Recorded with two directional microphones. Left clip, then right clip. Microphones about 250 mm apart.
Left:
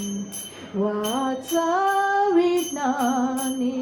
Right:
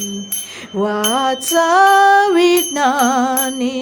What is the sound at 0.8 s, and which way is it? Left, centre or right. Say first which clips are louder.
Music: right 9 dB; right.